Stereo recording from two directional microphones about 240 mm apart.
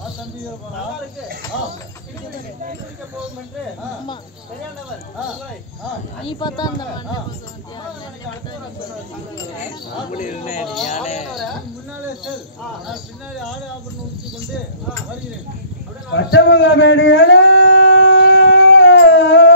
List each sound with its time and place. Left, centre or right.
6.2 s speech: centre
10.1 s speech: left
10.6 s speech: centre
10.9 s speech: left
16.1 s a sound: left